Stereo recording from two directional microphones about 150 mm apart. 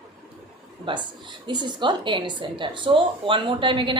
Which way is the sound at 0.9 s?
30° right (ahead or behind).